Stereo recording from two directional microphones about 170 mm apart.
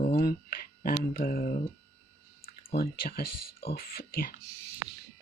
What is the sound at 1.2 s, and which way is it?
Speech, 60° left (ahead or behind).